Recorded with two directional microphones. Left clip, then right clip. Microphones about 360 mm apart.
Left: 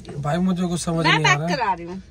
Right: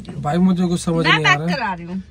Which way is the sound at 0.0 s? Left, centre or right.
Centre.